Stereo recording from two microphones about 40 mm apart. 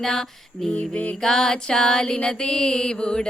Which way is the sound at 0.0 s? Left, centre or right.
Centre.